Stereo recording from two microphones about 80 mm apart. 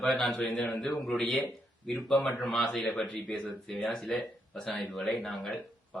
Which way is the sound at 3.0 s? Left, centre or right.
Centre.